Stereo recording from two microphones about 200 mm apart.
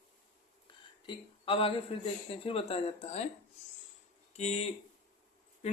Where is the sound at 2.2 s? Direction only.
30° left (ahead or behind).